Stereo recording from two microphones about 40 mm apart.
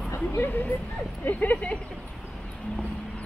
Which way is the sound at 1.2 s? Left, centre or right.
Left.